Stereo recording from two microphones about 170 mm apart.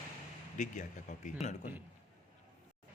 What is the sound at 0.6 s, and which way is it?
Speech, 45° left (ahead or behind).